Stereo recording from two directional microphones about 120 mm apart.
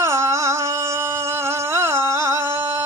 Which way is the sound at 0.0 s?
25° right (ahead or behind).